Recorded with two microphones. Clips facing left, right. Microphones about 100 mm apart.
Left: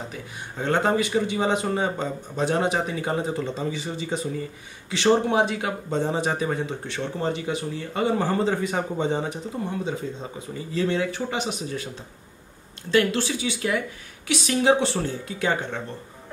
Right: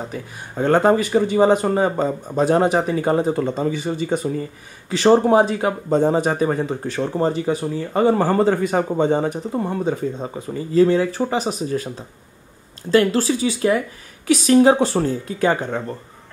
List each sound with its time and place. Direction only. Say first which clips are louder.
0.1 s speech: right 5 dB; 45° right (ahead or behind)
4.8 s speech: right 6 dB; 40° right (ahead or behind)
8.3 s speech: right 6 dB; 50° right (ahead or behind)
12.9 s speech: right 5 dB; 40° right (ahead or behind)